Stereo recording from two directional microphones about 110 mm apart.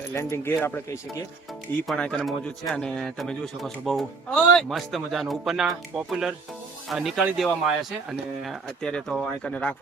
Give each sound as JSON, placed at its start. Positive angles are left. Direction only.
{"t": 0.1, "sound": "speech", "side_deg": 25}
{"t": 1.9, "sound": "a man's voice", "side_deg": 5}